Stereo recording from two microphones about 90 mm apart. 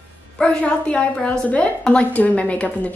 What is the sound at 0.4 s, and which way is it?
A woman's voice, 10° left (ahead or behind).